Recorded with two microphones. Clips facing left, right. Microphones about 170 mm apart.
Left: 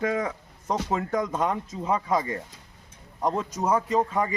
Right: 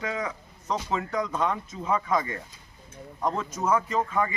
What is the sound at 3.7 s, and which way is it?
Speech, 35° left (ahead or behind).